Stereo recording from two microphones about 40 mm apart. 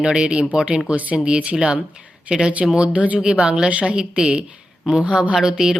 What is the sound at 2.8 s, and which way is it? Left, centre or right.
Speech, right.